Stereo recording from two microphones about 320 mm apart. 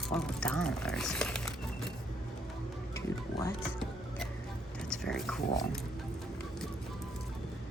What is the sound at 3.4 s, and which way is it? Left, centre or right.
Music, centre.